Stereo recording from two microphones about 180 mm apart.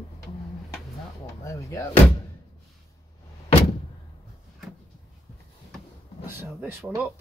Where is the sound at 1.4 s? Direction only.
15° left (ahead or behind).